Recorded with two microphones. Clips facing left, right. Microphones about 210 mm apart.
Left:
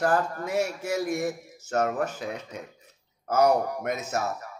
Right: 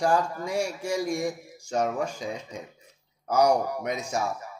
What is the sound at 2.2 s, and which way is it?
Speech, 60° left (ahead or behind).